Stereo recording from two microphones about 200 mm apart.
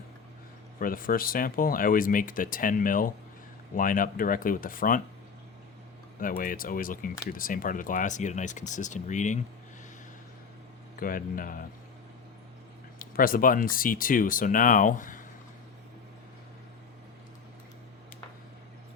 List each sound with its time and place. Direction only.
0.8 s speech: 45° left (ahead or behind)
6.1 s speech: 45° left (ahead or behind)
11.0 s speech: 45° left (ahead or behind)
13.0 s speech: 45° left (ahead or behind)